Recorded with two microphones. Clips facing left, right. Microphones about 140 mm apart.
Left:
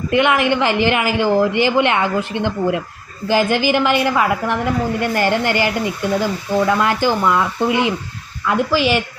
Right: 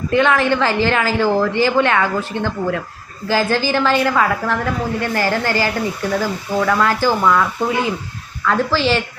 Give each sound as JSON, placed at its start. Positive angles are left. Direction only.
{"t": 0.1, "sound": "a woman's voice", "side_deg": 15}